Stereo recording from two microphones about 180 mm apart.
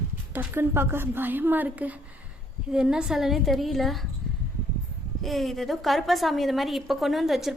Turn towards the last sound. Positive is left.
turn(degrees=0)  # may be behind; listen again after turning